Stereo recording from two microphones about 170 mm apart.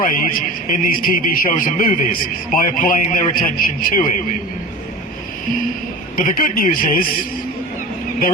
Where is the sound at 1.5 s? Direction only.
50° left (ahead or behind).